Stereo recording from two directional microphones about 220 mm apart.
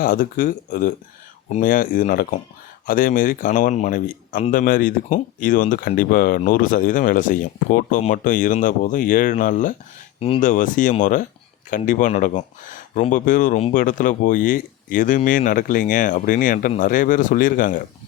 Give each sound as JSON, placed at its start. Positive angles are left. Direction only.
{"t": 0.0, "sound": "speech", "side_deg": 40}
{"t": 10.2, "sound": "speech", "side_deg": 25}